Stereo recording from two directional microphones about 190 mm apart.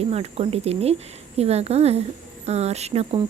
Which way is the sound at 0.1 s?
30° right (ahead or behind).